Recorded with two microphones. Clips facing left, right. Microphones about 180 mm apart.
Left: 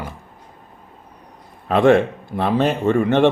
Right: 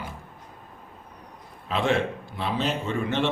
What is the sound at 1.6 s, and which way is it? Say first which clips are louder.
Speech: left 10 dB; 55° left (ahead or behind).